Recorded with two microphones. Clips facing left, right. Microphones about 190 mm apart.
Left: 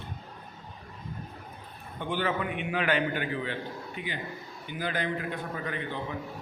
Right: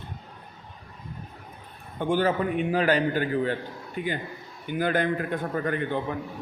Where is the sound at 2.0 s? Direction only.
45° right (ahead or behind).